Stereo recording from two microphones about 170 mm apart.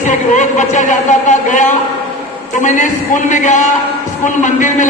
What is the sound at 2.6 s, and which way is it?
A man's voice, 45° left (ahead or behind).